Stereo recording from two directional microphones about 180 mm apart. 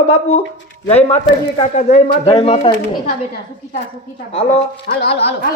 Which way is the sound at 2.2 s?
25° left (ahead or behind).